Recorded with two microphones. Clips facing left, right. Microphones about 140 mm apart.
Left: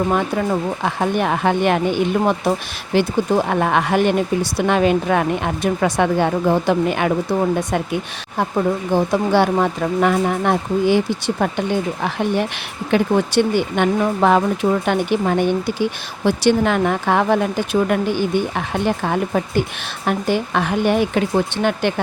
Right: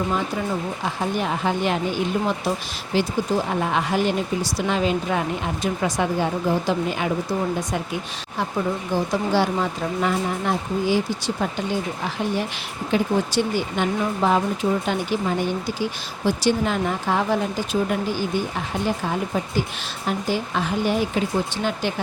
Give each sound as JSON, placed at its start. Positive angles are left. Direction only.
{"t": 0.1, "sound": "speech", "side_deg": 60}